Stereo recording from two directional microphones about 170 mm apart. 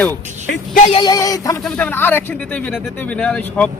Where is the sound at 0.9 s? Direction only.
25° left (ahead or behind).